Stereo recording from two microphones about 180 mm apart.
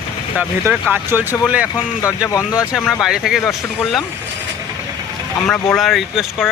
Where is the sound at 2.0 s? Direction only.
15° left (ahead or behind).